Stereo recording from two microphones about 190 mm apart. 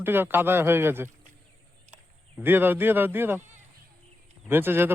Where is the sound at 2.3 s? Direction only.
10° right (ahead or behind).